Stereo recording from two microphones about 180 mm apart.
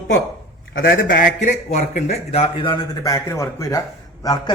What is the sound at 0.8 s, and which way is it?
Speech, 50° left (ahead or behind).